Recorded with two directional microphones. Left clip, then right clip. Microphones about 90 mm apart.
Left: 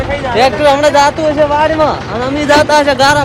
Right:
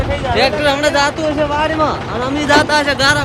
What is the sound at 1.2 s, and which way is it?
Speech, 25° right (ahead or behind).